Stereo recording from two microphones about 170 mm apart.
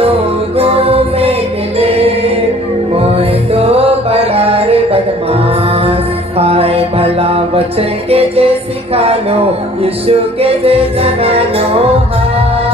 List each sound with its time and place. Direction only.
0.6 s music: 35° right (ahead or behind)